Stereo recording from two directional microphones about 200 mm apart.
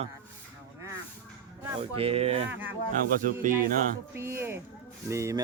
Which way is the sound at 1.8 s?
30° right (ahead or behind).